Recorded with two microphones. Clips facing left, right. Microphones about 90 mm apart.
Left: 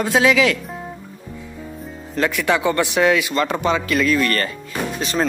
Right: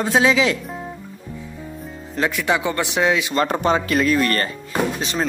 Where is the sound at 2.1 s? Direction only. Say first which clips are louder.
Left 1 dB; 20° right (ahead or behind).